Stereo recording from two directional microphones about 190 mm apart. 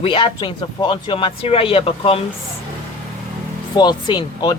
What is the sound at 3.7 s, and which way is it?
Speech, 20° left (ahead or behind).